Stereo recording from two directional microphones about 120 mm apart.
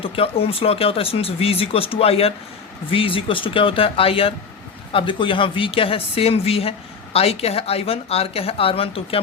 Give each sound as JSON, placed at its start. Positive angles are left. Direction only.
{"t": 0.0, "sound": "speech", "side_deg": 55}